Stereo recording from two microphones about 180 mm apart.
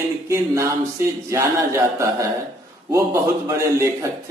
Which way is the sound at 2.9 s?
15° right (ahead or behind).